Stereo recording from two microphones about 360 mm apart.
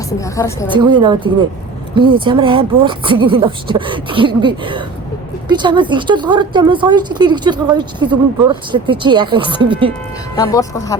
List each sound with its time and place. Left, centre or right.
0.3 s speech: centre
0.7 s a woman's voice: centre
10.3 s speech: centre